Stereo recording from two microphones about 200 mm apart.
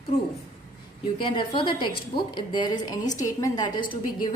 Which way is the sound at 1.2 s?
25° left (ahead or behind).